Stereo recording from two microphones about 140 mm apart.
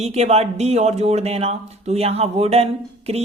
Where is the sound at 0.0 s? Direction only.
50° right (ahead or behind).